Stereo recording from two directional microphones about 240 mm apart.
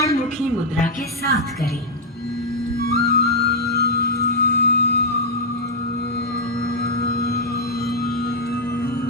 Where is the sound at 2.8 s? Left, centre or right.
Left.